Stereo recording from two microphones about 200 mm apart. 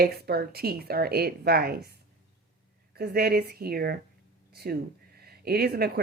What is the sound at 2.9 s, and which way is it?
Speech, 50° right (ahead or behind).